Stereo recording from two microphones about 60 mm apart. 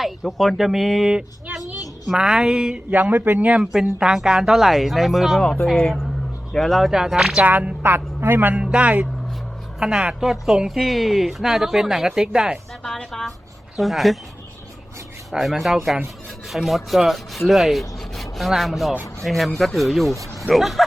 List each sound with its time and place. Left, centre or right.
0.3 s rub: centre
1.1 s speech: centre
2.9 s speech: right
3.6 s speech: centre
3.9 s rub: centre
6.5 s rub: centre
6.9 s speech: centre
7.4 s a man's voice: right
8.6 s speech: centre
9.8 s speech: centre
12.8 s a sound: centre
13.7 s rub: centre
15.3 s rub: centre